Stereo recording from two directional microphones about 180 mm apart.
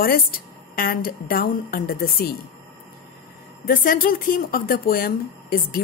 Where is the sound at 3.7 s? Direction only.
50° left (ahead or behind).